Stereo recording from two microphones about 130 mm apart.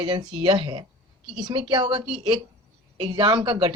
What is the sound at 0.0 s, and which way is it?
Speech, 35° right (ahead or behind).